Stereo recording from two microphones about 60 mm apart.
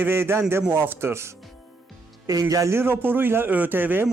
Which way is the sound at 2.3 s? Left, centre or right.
Right.